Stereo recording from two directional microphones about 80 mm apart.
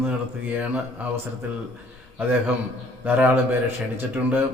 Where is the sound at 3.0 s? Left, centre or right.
Right.